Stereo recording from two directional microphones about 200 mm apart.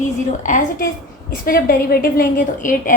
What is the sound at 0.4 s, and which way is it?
A woman's voice, 40° left (ahead or behind).